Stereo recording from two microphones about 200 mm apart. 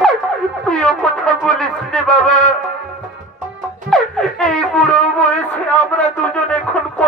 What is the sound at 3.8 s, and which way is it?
Music, centre (ahead or behind).